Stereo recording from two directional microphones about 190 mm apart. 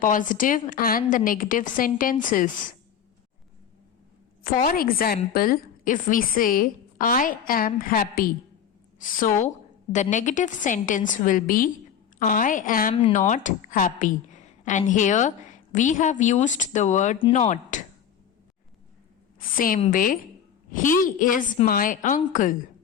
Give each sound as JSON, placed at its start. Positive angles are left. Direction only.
{"t": 0.0, "sound": "a woman's voice", "side_deg": 45}
{"t": 4.4, "sound": "a woman's voice", "side_deg": 45}
{"t": 12.9, "sound": "speech", "side_deg": 30}
{"t": 13.1, "sound": "a woman's voice", "side_deg": 40}
{"t": 19.5, "sound": "a woman's voice", "side_deg": 45}